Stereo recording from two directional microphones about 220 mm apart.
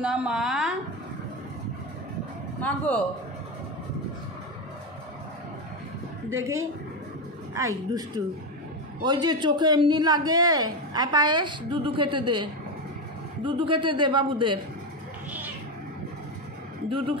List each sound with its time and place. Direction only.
0.0 s a woman's voice: 5° right (ahead or behind)
2.6 s speech: 5° left (ahead or behind)
6.4 s a woman's voice: 15° right (ahead or behind)
9.0 s speech: 20° right (ahead or behind)